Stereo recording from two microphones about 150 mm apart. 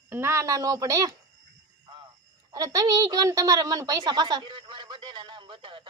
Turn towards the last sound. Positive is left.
turn(degrees=-35)  # may be behind; listen again after turning